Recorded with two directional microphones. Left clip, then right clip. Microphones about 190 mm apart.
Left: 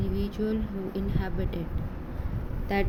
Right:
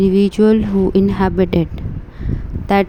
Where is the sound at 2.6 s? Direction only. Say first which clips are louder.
Right 14 dB; 50° right (ahead or behind).